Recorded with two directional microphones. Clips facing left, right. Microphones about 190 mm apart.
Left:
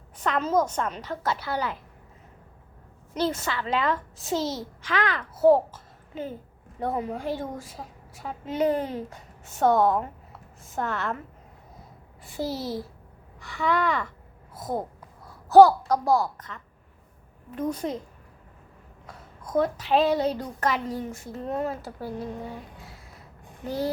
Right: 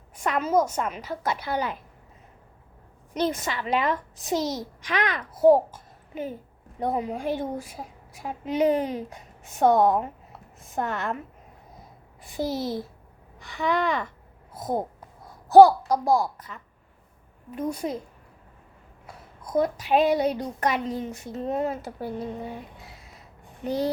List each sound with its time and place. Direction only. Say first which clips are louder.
0.2 s a woman's voice: right 1 dB; 10° right (ahead or behind)
3.1 s a woman's voice: right 1 dB; 15° right (ahead or behind)
12.2 s a woman's voice: right 2 dB; 15° right (ahead or behind)
19.0 s a woman's voice: even; 10° right (ahead or behind)
23.6 s a woman's voice: right 2 dB; 20° right (ahead or behind)